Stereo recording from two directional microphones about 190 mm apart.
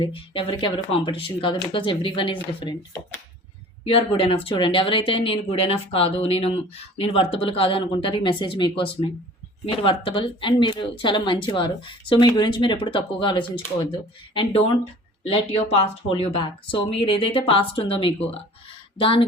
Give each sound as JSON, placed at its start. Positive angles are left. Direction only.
{"t": 0.0, "sound": "speech", "side_deg": 30}
{"t": 3.8, "sound": "speech", "side_deg": 30}